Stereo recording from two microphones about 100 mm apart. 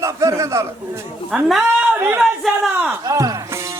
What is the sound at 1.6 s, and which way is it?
Speech, 20° right (ahead or behind).